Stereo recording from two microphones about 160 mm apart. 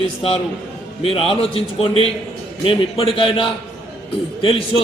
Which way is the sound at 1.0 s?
35° left (ahead or behind).